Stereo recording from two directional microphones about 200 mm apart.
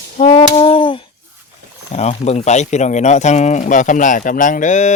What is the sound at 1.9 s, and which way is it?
Speech, 35° left (ahead or behind).